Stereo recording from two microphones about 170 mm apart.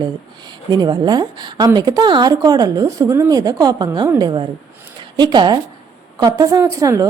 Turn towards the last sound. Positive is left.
turn(degrees=-20)  # may be behind; listen again after turning